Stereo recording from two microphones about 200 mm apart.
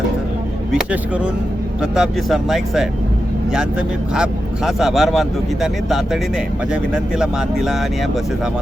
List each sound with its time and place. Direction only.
0.7 s speech: 5° right (ahead or behind)
6.9 s speech: 5° right (ahead or behind)